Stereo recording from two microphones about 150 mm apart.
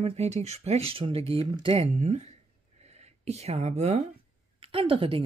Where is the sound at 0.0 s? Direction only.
45° right (ahead or behind).